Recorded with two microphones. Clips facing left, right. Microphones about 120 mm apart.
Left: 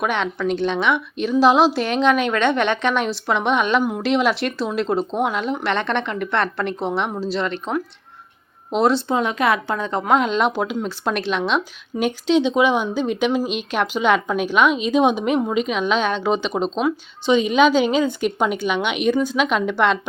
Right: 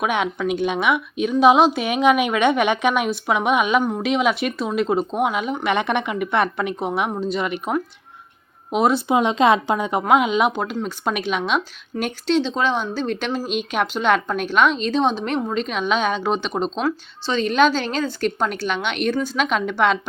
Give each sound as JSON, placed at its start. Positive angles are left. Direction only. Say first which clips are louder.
{"t": 0.0, "sound": "a woman's voice", "louder": "even", "side_deg": -5}
{"t": 7.4, "sound": "a woman's voice", "louder": "right 1 dB", "side_deg": -10}
{"t": 9.1, "sound": "a woman's voice", "louder": "right 3 dB", "side_deg": -20}
{"t": 10.5, "sound": "a woman's voice", "louder": "left 2 dB", "side_deg": 10}
{"t": 16.8, "sound": "a woman's voice", "louder": "left 3 dB", "side_deg": 15}